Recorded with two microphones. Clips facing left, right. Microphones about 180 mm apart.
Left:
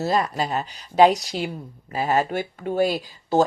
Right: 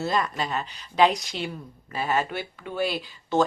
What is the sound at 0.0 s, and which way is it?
Speech, 35° left (ahead or behind).